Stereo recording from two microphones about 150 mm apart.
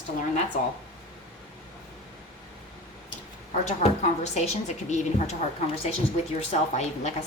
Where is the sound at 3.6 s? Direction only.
45° left (ahead or behind).